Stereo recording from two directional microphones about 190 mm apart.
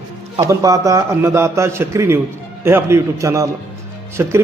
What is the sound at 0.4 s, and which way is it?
A man's voice, 15° right (ahead or behind).